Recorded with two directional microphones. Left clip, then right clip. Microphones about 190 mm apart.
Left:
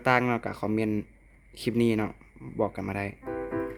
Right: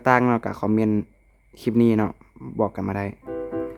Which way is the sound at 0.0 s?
15° right (ahead or behind).